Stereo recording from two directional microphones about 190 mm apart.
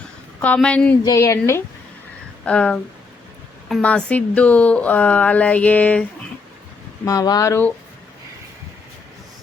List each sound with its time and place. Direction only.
0.4 s a woman's voice: 5° left (ahead or behind)
7.0 s a woman's voice: 15° left (ahead or behind)